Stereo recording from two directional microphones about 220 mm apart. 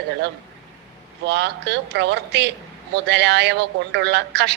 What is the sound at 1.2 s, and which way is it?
A woman's voice, 50° right (ahead or behind).